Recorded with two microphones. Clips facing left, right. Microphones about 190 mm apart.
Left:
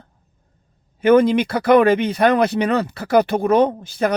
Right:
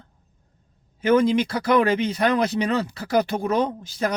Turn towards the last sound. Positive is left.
turn(degrees=60)  # may be behind; listen again after turning